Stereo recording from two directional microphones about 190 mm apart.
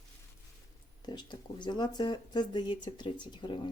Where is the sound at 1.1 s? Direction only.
25° left (ahead or behind).